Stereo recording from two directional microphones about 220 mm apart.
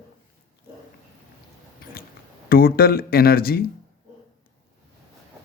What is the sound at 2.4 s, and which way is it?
Speech, 40° left (ahead or behind).